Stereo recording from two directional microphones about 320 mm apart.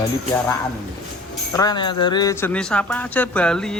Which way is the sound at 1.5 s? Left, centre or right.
Centre.